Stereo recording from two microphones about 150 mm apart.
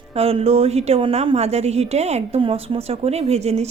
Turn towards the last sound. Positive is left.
turn(degrees=-45)  # may be behind; listen again after turning